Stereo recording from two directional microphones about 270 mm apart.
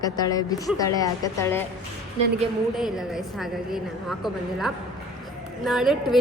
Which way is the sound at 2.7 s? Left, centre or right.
Centre.